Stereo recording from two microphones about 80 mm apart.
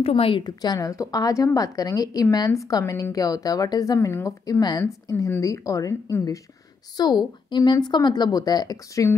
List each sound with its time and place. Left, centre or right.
0.1 s a woman's voice: left
0.7 s a woman's voice: left
4.1 s speech: left
4.6 s a woman's voice: left
5.4 s a woman's voice: left
7.0 s a woman's voice: left